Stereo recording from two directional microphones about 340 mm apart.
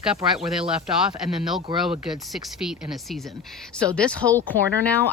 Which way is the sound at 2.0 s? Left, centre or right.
Centre.